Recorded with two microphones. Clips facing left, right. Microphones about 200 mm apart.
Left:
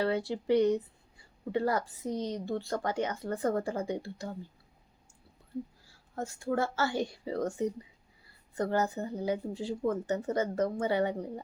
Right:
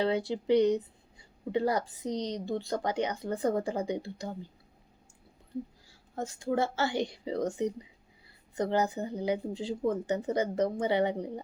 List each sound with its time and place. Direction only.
0.0 s a woman's voice: 20° right (ahead or behind)
6.1 s a woman's voice: 20° right (ahead or behind)